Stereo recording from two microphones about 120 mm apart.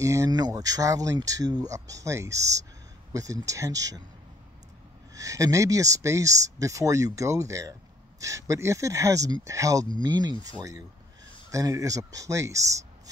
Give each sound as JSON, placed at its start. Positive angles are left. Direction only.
{"t": 0.0, "sound": "speech", "side_deg": -25}
{"t": 5.1, "sound": "speech", "side_deg": -30}
{"t": 11.5, "sound": "speech", "side_deg": -25}